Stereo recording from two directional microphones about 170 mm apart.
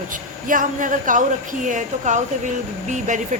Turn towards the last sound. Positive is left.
turn(degrees=-45)  # may be behind; listen again after turning